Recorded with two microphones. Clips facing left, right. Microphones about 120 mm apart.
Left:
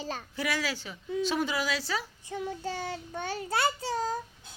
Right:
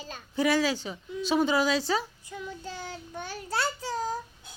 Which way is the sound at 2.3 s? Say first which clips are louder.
Left 4 dB; 75° left (ahead or behind).